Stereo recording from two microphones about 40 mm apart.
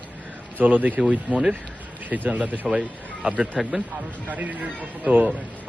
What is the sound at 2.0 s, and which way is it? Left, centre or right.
A man's voice, right.